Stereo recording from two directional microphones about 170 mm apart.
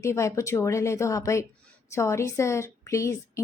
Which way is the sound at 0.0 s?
15° left (ahead or behind).